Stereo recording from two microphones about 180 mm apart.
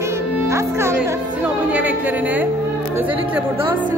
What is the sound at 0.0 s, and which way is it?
Music, 15° right (ahead or behind).